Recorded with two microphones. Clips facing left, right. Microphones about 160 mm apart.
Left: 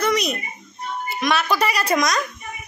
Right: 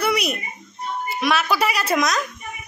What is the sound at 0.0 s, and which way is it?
Bird, 10° right (ahead or behind).